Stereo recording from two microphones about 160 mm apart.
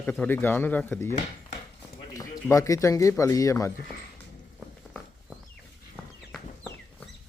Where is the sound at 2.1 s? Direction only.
20° left (ahead or behind).